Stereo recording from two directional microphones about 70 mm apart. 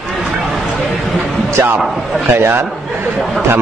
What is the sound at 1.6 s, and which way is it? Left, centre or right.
Speech, right.